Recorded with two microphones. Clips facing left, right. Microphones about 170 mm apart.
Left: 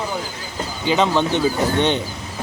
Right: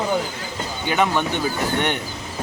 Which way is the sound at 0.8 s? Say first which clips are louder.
Left 3 dB; 20° left (ahead or behind).